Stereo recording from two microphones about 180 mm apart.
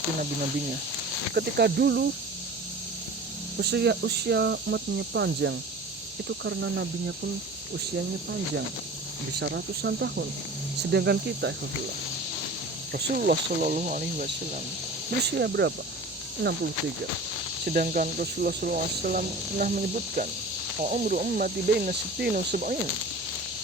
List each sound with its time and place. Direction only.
1.3 s speech: 65° right (ahead or behind)
3.6 s speech: 70° right (ahead or behind)
7.9 s speech: 60° right (ahead or behind)
9.4 s speech: 75° right (ahead or behind)
12.9 s speech: 55° right (ahead or behind)
15.2 s speech: 65° right (ahead or behind)
17.7 s speech: 55° right (ahead or behind)